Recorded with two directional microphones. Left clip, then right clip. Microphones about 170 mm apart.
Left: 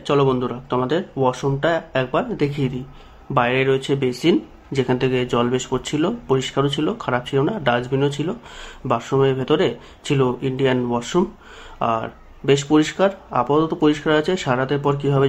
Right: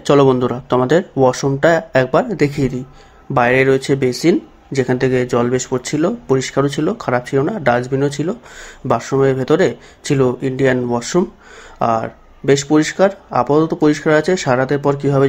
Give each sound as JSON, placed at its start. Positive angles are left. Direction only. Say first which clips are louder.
{"t": 0.0, "sound": "speech", "louder": "right 6 dB", "side_deg": -30}